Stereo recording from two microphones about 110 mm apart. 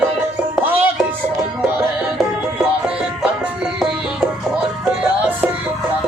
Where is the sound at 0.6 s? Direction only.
15° right (ahead or behind).